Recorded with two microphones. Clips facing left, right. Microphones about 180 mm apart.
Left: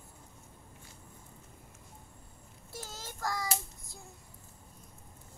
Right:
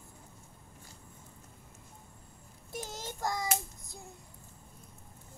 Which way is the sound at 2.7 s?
20° right (ahead or behind).